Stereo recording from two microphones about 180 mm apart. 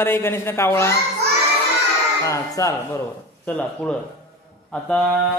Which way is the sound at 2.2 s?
20° left (ahead or behind).